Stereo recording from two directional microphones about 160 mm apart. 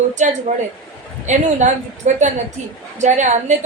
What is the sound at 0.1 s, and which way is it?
A woman's voice, 50° right (ahead or behind).